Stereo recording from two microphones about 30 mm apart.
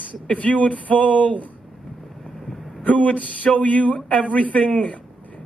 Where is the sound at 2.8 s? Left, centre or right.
Left.